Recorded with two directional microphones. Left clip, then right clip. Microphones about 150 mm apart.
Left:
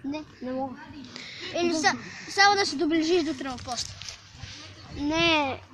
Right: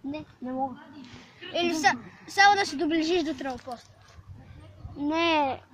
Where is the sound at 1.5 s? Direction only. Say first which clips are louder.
Right 1 dB; 30° right (ahead or behind).